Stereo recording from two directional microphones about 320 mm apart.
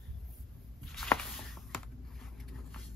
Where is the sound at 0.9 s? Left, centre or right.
Centre.